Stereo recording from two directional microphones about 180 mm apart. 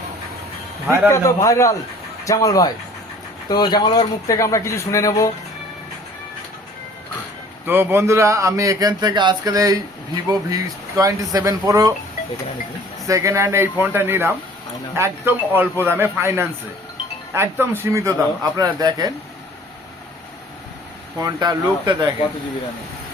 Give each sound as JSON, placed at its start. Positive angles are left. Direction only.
{"t": 1.0, "sound": "speech", "side_deg": 15}
{"t": 7.7, "sound": "a man's voice", "side_deg": -10}
{"t": 13.1, "sound": "a man's voice", "side_deg": -15}
{"t": 21.2, "sound": "a man's voice", "side_deg": -20}